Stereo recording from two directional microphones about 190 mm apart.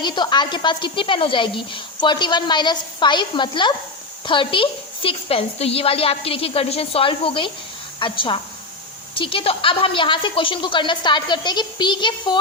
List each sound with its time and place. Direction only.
0.0 s a woman's voice: 25° left (ahead or behind)